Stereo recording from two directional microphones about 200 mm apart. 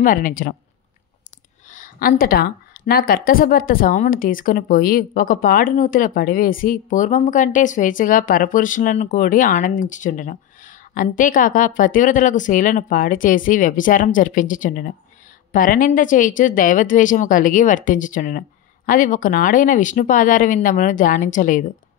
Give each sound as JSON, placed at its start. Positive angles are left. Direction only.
{"t": 0.0, "sound": "speech", "side_deg": 45}
{"t": 1.7, "sound": "speech", "side_deg": 45}